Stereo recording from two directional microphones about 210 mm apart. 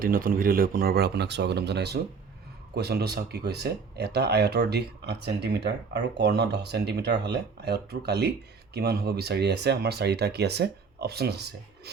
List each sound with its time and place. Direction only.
0.0 s speech: 40° right (ahead or behind)